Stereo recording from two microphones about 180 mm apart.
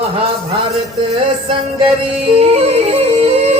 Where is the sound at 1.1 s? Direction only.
30° right (ahead or behind).